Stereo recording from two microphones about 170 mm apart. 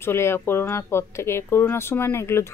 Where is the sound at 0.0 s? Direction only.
15° left (ahead or behind).